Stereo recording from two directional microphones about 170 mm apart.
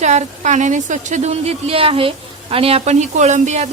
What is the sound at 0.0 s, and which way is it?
A woman's voice, 45° right (ahead or behind).